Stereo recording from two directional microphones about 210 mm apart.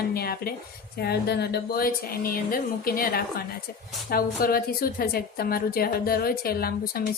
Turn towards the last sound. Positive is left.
turn(degrees=45)  # may be behind; listen again after turning